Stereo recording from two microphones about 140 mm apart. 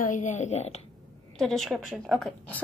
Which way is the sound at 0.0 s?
65° left (ahead or behind).